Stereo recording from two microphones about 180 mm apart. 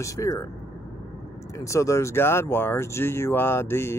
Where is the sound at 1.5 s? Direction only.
15° left (ahead or behind).